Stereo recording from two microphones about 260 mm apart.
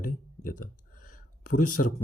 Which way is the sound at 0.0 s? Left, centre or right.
Left.